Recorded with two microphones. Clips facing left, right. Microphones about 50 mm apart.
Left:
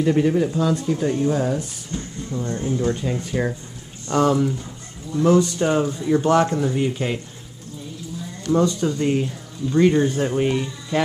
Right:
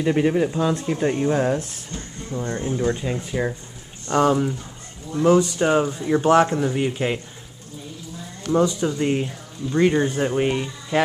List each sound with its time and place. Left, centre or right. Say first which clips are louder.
0.0 s speech: left 1 dB; centre
2.3 s speech: left 1 dB; right
3.2 s speech: left 1 dB; centre
4.1 s speech: even; centre
8.5 s speech: even; centre